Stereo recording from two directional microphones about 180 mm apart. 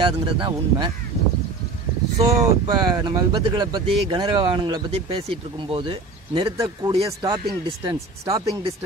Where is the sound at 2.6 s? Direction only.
25° right (ahead or behind).